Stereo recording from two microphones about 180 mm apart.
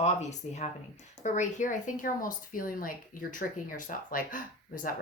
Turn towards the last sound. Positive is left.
turn(degrees=50)  # may be behind; listen again after turning